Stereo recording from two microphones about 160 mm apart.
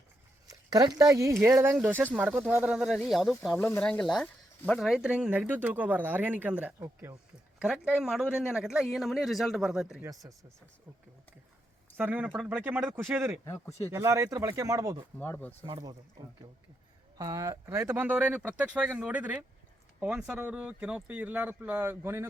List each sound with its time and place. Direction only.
0.4 s a man's voice: 25° right (ahead or behind); by 3.5 s centre (ahead or behind)
3.5 s speech: 15° left (ahead or behind)
3.8 s speech: 5° left (ahead or behind); by 7.2 s 15° right (ahead or behind)
7.6 s a man's voice: 5° right (ahead or behind)
10.2 s speech: 20° right (ahead or behind)
11.9 s speech: 10° right (ahead or behind)
13.4 s a man's voice: 20° left (ahead or behind)
13.9 s speech: 20° right (ahead or behind)
15.2 s speech: 10° left (ahead or behind)
15.6 s speech: 25° right (ahead or behind)
17.2 s speech: 25° right (ahead or behind)